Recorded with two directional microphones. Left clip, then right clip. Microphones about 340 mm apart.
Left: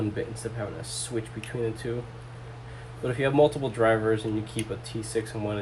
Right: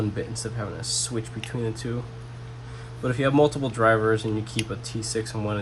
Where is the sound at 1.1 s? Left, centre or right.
Centre.